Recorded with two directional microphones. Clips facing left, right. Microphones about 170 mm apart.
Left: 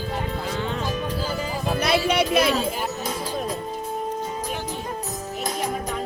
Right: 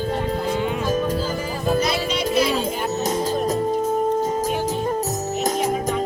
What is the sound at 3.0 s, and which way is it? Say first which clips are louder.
Music: right 6 dB; 45° right (ahead or behind).